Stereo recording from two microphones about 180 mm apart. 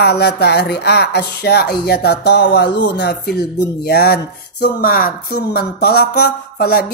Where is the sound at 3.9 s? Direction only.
60° left (ahead or behind).